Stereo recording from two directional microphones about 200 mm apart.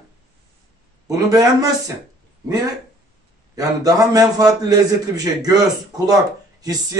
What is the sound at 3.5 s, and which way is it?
A man's voice, 20° right (ahead or behind).